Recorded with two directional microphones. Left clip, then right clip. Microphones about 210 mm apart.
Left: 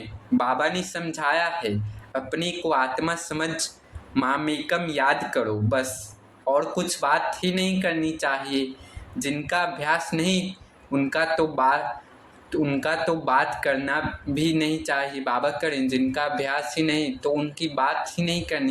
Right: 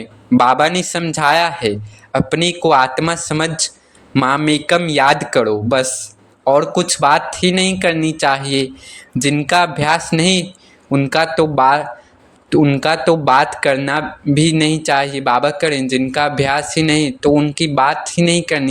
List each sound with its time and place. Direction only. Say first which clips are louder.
0.3 s a man's voice: right 11 dB; 50° right (ahead or behind)